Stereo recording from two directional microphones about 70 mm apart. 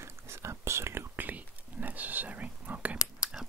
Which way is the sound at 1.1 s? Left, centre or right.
Right.